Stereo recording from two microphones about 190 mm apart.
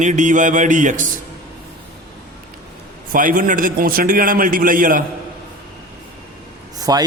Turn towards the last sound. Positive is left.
turn(degrees=-20)  # may be behind; listen again after turning